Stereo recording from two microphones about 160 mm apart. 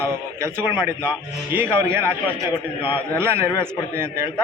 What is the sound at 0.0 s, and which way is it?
Speech, 15° right (ahead or behind).